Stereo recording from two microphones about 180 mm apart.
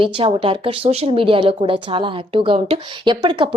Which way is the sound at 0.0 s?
30° right (ahead or behind).